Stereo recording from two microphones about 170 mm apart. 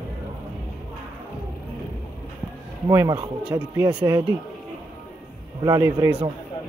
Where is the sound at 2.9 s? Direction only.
20° right (ahead or behind).